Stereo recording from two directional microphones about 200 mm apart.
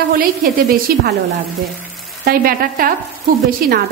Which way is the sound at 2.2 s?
45° right (ahead or behind).